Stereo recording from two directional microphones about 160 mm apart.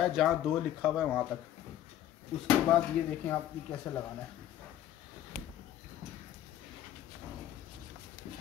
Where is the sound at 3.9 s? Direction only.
15° left (ahead or behind).